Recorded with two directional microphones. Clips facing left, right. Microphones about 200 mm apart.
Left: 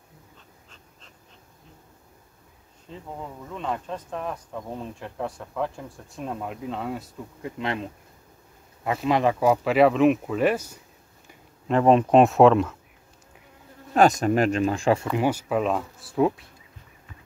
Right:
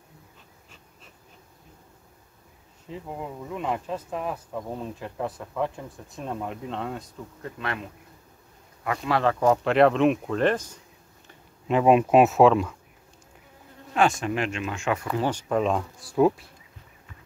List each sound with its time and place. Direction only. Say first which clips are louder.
3.1 s speech: right 2 dB; 10° right (ahead or behind); by 7.5 s 5° left (ahead or behind)
7.5 s speech: left 4 dB; 20° left (ahead or behind)
8.8 s speech: left 2 dB; 20° left (ahead or behind)
9.4 s speech: right 1 dB; 5° left (ahead or behind)
11.6 s speech: left 1 dB; 5° right (ahead or behind)
13.9 s speech: left 5 dB; 40° left (ahead or behind)
15.0 s speech: left 2 dB; 10° left (ahead or behind)